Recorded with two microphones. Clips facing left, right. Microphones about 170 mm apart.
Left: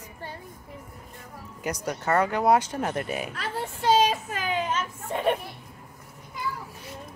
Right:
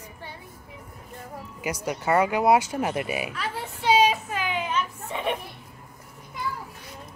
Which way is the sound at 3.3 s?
50° left (ahead or behind).